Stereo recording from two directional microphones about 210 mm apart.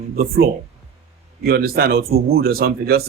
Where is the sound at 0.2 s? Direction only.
45° right (ahead or behind).